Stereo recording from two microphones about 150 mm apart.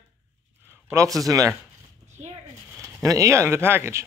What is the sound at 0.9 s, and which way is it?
Speech, 20° right (ahead or behind).